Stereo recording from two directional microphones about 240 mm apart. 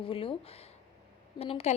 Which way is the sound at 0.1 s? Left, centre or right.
Left.